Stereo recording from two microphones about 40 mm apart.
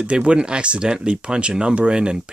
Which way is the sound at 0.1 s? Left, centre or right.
Right.